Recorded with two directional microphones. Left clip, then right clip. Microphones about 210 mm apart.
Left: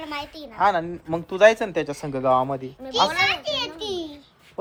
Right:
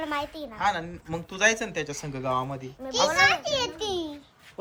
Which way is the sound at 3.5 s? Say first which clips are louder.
Left 1 dB; 40° right (ahead or behind).